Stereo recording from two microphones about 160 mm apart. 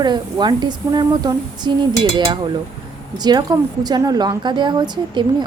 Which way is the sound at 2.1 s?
30° right (ahead or behind).